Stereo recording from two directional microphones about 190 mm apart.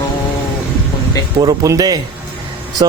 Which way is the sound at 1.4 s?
20° right (ahead or behind).